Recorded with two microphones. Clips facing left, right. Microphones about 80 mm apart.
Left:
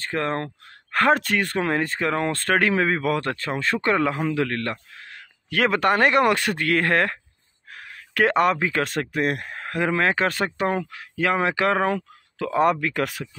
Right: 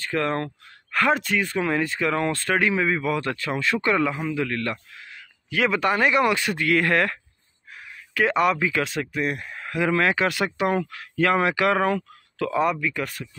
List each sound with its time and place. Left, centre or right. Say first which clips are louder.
0.0 s speech: right 1 dB; left
0.9 s speech: left 2 dB; left
2.4 s speech: left 4 dB; left
4.6 s speech: even; left
7.7 s speech: left 2 dB; left
9.8 s speech: even; left
10.9 s speech: right 2 dB; centre
12.8 s speech: left 3 dB; left